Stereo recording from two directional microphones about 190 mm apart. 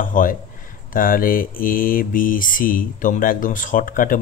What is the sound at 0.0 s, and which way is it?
Mantra, 45° left (ahead or behind).